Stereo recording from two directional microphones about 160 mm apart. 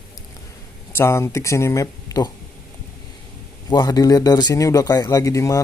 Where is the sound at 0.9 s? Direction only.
15° left (ahead or behind).